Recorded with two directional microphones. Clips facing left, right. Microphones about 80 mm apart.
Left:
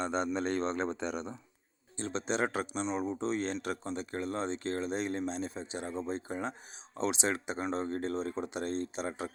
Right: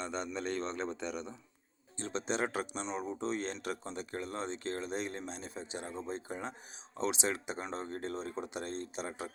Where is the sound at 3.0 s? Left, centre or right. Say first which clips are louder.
Left 3 dB; left.